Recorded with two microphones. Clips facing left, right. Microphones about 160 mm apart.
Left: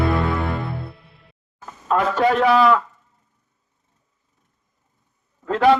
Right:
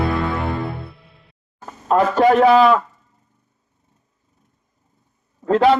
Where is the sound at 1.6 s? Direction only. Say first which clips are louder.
Right 4 dB; 35° right (ahead or behind).